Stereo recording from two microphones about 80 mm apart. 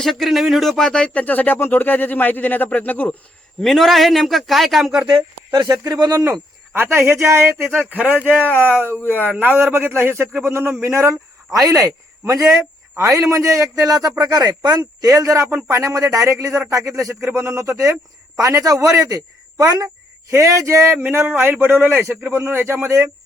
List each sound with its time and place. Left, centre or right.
0.0 s speech: centre
3.6 s a man's voice: centre
5.5 s a man's voice: right
6.7 s a man's voice: right
11.6 s a man's voice: right